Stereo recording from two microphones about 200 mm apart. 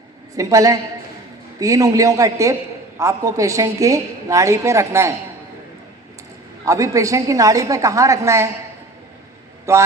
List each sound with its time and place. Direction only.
0.3 s a woman's voice: 15° right (ahead or behind)
6.7 s a woman's voice: 15° right (ahead or behind)
9.7 s a woman's voice: 15° right (ahead or behind)